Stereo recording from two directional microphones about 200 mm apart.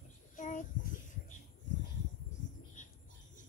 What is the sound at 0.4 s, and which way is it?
Child singing, 40° left (ahead or behind).